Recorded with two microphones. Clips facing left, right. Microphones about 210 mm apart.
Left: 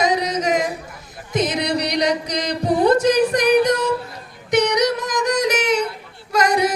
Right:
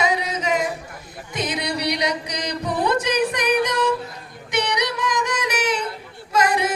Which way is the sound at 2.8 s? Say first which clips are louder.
Left 6 dB; 40° left (ahead or behind).